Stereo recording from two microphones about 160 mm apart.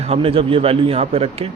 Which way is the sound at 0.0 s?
40° right (ahead or behind).